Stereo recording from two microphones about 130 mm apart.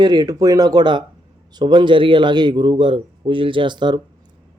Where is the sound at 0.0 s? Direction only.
30° right (ahead or behind).